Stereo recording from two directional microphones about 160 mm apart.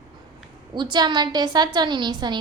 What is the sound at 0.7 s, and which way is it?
A woman's voice, 30° right (ahead or behind).